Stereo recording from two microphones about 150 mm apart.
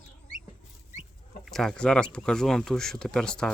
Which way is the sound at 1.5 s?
5° left (ahead or behind).